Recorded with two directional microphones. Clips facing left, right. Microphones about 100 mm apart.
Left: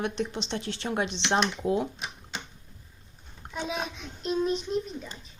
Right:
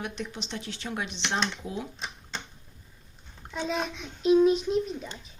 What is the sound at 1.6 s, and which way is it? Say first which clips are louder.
Speech: left 9 dB; 55° left (ahead or behind).